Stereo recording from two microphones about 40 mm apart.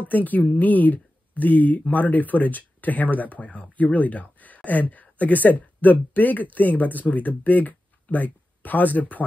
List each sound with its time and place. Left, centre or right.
0.1 s speech: left